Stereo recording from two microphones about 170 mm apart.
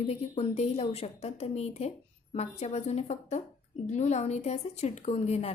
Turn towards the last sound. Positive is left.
turn(degrees=40)  # may be behind; listen again after turning